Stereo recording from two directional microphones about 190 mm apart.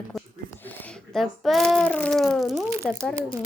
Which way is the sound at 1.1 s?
Centre (ahead or behind).